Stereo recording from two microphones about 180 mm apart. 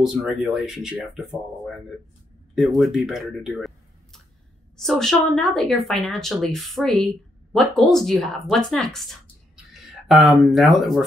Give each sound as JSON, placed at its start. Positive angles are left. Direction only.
{"t": 0.0, "sound": "speech", "side_deg": 0}
{"t": 2.5, "sound": "speech", "side_deg": 0}
{"t": 10.0, "sound": "speech", "side_deg": 0}